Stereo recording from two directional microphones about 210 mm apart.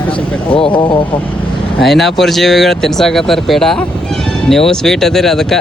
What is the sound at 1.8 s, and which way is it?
Speech, centre (ahead or behind).